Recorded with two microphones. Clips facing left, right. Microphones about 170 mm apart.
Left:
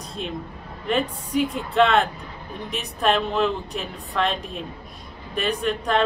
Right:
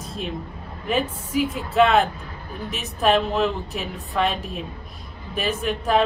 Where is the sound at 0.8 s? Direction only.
5° right (ahead or behind).